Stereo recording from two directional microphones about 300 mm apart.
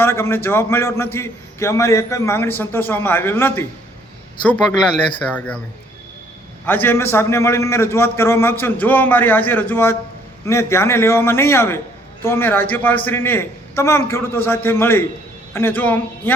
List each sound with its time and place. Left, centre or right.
0.0 s a man's voice: centre
5.3 s a man's voice: centre
6.7 s a man's voice: centre